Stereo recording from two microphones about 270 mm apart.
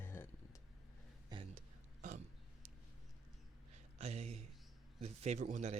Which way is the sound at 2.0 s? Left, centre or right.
Right.